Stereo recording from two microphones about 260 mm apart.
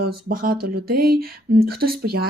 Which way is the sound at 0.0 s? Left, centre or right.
Right.